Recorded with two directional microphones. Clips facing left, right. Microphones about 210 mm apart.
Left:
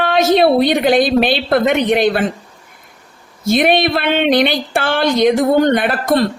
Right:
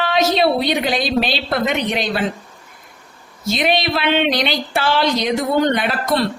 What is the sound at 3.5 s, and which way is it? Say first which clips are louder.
Speech: left 5 dB; 55° left (ahead or behind).